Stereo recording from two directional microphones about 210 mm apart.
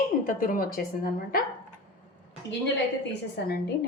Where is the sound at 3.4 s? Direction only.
50° left (ahead or behind).